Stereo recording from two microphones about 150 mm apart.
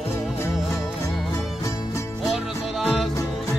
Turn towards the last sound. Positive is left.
turn(degrees=0)  # may be behind; listen again after turning